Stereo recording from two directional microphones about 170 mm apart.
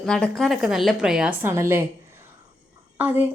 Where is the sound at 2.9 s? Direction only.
10° right (ahead or behind).